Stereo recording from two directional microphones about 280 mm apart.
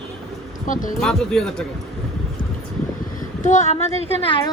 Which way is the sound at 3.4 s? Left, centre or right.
Left.